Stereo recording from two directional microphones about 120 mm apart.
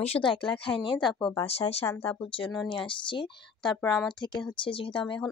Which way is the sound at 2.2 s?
45° left (ahead or behind).